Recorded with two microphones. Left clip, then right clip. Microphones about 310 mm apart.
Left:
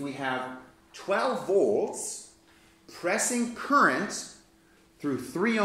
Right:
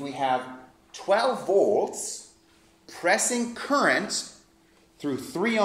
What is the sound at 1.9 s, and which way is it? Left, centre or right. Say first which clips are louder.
Speech: right 1 dB; right.